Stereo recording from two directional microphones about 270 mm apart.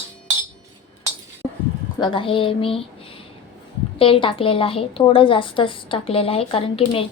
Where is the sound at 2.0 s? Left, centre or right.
Centre.